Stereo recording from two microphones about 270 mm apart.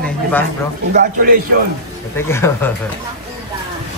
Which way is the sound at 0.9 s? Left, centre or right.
Right.